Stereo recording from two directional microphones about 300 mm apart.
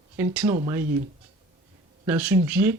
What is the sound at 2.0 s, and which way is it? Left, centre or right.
Speech, centre.